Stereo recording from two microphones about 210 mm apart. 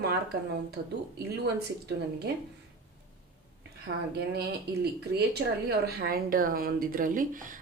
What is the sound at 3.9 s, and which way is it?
Speech, 55° right (ahead or behind).